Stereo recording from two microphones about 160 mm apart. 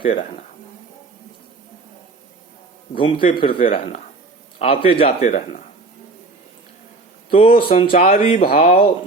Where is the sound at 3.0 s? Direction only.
35° left (ahead or behind); by 5.6 s 50° left (ahead or behind).